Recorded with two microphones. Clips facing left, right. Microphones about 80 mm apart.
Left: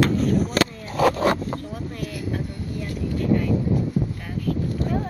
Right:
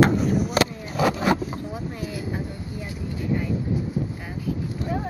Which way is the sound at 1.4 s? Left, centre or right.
Centre.